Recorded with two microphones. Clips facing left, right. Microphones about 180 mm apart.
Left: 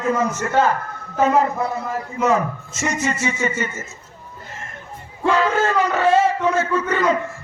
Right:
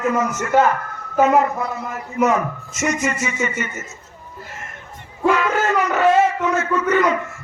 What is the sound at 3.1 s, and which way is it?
Speech, 30° left (ahead or behind).